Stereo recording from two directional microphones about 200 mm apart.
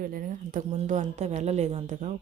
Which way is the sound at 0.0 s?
45° right (ahead or behind).